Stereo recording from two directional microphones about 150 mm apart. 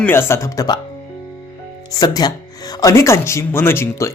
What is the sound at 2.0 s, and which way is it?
Speech, 25° left (ahead or behind).